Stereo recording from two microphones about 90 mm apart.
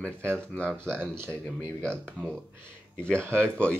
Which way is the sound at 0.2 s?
25° right (ahead or behind).